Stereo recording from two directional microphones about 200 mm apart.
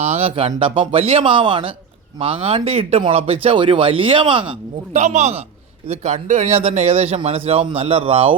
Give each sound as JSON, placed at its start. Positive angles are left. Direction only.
{"t": 0.0, "sound": "a man's voice", "side_deg": -30}
{"t": 4.9, "sound": "a man's voice", "side_deg": -35}